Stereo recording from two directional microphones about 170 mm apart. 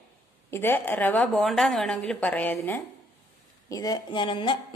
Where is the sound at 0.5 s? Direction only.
15° left (ahead or behind).